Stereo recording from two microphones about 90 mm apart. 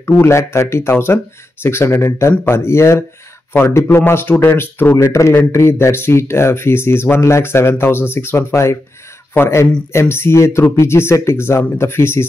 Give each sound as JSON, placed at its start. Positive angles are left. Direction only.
{"t": 0.0, "sound": "speech", "side_deg": 30}